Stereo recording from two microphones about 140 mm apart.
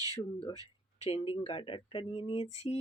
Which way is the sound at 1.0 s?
45° left (ahead or behind).